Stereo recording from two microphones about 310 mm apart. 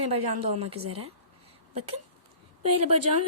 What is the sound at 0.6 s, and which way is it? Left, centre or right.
Speech, centre.